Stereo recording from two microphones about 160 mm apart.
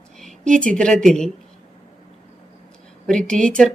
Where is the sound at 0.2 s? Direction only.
5° left (ahead or behind).